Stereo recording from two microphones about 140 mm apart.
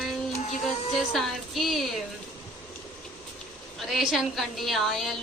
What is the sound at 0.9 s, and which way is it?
A woman's voice, centre (ahead or behind).